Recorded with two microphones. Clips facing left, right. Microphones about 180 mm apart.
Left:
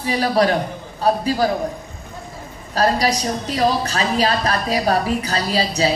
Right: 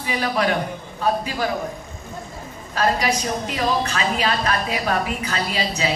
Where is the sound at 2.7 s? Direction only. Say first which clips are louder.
Left 3 dB; 35° left (ahead or behind).